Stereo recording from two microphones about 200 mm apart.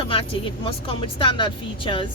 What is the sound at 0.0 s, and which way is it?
Speech, 25° left (ahead or behind).